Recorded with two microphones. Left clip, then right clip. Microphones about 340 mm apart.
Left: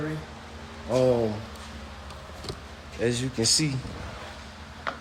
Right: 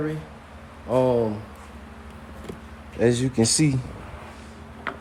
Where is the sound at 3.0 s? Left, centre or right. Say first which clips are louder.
Right 5 dB; centre.